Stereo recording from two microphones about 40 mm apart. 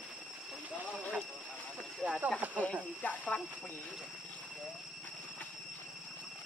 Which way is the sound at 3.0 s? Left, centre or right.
Left.